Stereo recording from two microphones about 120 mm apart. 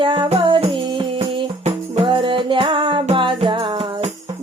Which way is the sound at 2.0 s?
45° right (ahead or behind).